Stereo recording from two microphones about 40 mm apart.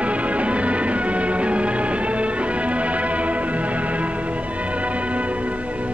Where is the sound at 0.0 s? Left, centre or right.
Right.